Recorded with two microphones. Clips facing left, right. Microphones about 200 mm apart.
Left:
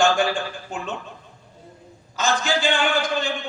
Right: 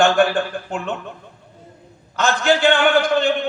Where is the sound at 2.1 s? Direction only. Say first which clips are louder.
Right 5 dB; 60° right (ahead or behind).